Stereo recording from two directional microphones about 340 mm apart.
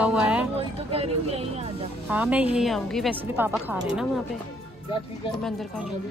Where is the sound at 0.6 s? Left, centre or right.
Centre.